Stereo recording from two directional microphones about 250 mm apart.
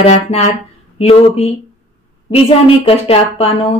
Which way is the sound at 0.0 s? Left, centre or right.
Left.